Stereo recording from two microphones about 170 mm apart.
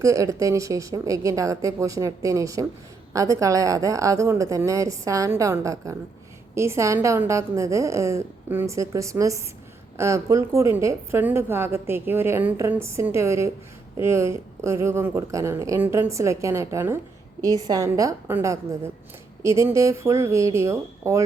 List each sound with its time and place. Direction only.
0.0 s a woman's voice: 20° right (ahead or behind)